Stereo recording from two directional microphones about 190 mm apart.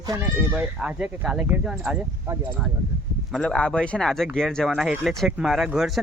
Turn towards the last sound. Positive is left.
turn(degrees=0)  # may be behind; listen again after turning